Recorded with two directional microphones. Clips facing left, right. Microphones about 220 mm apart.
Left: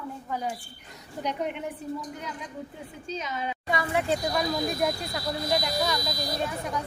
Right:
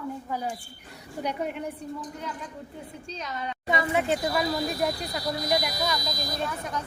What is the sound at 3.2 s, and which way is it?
Speech, 5° left (ahead or behind).